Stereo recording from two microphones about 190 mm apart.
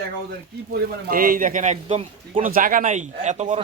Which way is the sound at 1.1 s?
50° right (ahead or behind).